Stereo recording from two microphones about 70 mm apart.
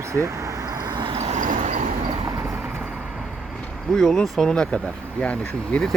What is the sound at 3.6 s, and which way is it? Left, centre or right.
Speech, centre.